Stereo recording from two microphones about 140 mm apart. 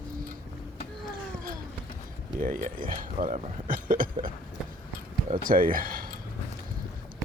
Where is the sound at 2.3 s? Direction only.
75° right (ahead or behind).